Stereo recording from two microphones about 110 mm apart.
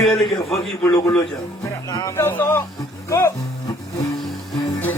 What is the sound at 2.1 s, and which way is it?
Speech, 20° left (ahead or behind).